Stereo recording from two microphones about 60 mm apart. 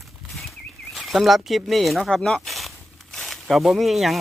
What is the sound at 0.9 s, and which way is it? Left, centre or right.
Speech, centre.